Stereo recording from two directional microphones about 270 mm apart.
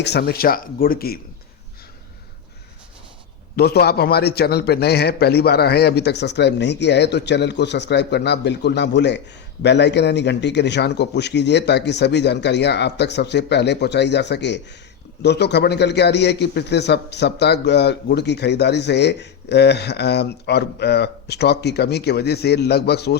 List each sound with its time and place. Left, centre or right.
0.0 s a man's voice: left
3.5 s a man's voice: left